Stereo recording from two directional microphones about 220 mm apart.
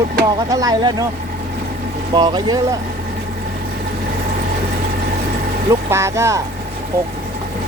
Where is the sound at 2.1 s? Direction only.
20° right (ahead or behind).